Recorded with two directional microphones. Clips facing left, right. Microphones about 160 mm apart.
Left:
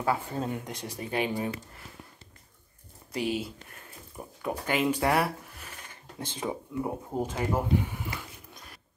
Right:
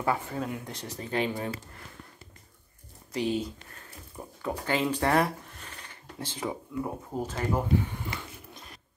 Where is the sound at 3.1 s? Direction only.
10° left (ahead or behind).